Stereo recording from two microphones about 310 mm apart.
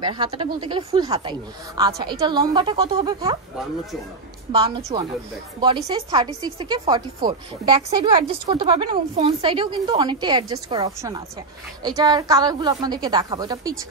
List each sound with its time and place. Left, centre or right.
0.0 s speech: centre
4.5 s speech: centre